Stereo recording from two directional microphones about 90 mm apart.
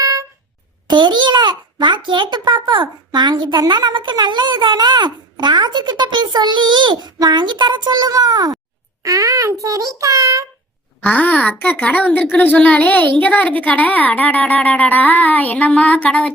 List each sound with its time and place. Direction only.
0.0 s a sound: 40° right (ahead or behind)
0.9 s a child's voice: 55° right (ahead or behind); by 10.4 s 35° right (ahead or behind)
11.0 s speech: 20° left (ahead or behind)